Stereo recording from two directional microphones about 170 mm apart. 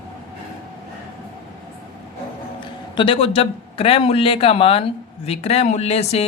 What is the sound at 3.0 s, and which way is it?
A man's voice, 30° left (ahead or behind).